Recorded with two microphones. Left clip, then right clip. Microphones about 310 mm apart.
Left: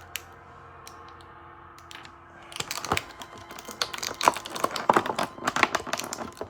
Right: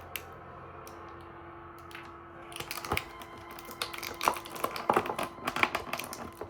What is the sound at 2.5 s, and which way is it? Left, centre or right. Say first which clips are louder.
Typing: left 6 dB; left.